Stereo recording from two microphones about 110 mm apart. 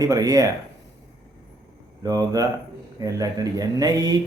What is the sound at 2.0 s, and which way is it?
Speech, 35° right (ahead or behind).